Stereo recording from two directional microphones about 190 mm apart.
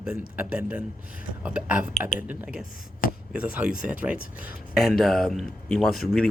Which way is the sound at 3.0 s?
50° left (ahead or behind).